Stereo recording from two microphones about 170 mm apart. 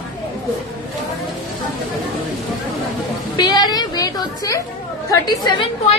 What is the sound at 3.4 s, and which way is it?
A woman's voice, 25° left (ahead or behind).